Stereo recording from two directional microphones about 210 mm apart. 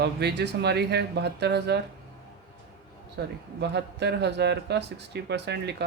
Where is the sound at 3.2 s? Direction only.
55° right (ahead or behind).